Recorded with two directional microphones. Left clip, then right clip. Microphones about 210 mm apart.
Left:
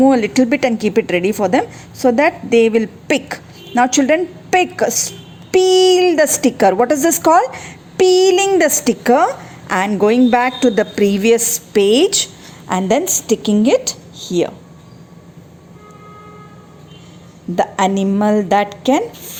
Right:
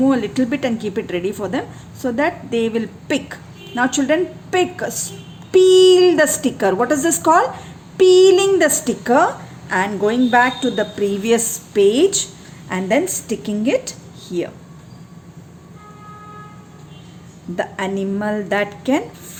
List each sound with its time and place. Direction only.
0.0 s a woman's voice: 30° left (ahead or behind)
17.5 s a woman's voice: 25° left (ahead or behind)